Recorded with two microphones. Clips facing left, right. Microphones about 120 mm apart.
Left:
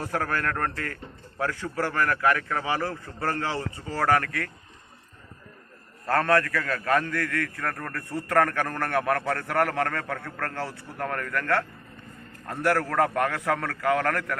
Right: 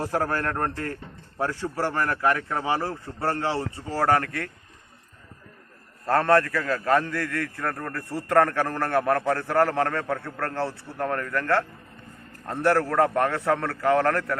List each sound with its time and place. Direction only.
0.2 s a man's voice: 25° right (ahead or behind)
6.1 s a man's voice: 25° right (ahead or behind)